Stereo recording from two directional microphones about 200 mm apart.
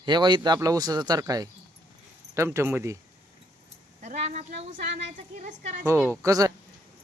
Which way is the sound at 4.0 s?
40° right (ahead or behind).